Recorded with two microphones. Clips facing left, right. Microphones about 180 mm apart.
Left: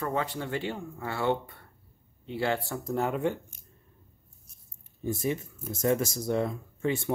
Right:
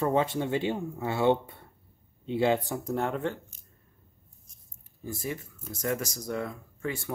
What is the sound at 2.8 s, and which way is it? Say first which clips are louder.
Speech: left 1 dB; centre (ahead or behind).